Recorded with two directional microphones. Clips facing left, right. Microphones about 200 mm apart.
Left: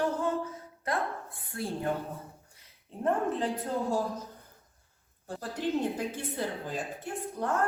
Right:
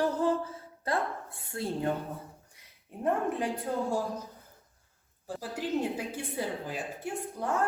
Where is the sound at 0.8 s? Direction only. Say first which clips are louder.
Right 1 dB; 30° right (ahead or behind).